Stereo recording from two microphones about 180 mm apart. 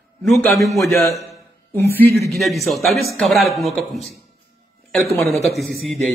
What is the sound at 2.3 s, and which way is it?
A man's voice, centre (ahead or behind).